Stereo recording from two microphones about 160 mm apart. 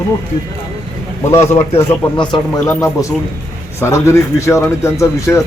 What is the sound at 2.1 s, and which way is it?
A man's voice, 30° left (ahead or behind).